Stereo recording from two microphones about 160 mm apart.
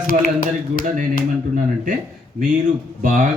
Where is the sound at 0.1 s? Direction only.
60° left (ahead or behind).